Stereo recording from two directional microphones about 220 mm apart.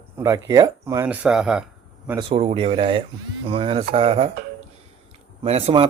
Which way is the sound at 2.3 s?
30° right (ahead or behind).